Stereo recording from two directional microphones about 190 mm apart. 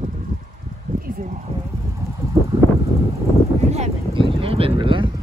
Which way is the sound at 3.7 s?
30° right (ahead or behind).